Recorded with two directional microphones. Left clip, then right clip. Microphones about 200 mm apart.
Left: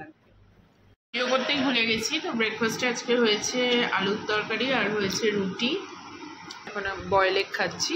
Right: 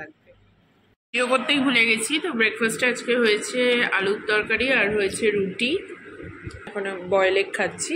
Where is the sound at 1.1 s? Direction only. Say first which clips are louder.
Right 4 dB; 25° right (ahead or behind).